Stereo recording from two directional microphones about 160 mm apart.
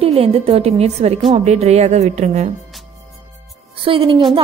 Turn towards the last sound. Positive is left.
turn(degrees=-35)  # may be behind; listen again after turning